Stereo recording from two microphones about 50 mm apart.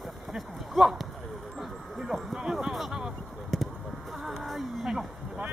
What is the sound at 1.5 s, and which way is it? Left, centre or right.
Music, centre.